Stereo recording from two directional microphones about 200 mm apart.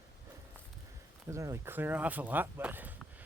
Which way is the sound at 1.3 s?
15° right (ahead or behind).